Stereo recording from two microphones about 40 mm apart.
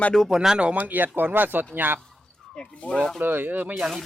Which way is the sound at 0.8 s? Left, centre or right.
Right.